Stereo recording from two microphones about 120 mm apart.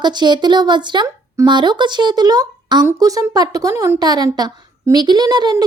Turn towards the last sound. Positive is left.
turn(degrees=-35)  # may be behind; listen again after turning